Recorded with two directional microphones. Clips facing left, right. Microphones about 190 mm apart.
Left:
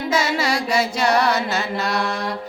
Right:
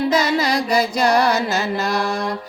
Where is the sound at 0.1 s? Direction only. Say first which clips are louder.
Right 3 dB; 35° right (ahead or behind).